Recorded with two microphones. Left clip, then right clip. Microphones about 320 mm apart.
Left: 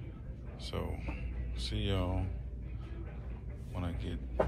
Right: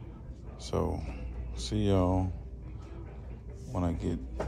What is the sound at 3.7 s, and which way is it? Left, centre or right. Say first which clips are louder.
Speech: right 9 dB; centre.